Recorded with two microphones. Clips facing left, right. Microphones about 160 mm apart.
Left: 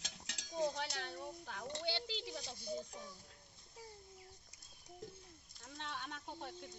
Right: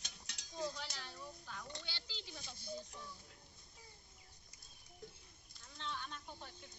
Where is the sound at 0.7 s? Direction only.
60° left (ahead or behind).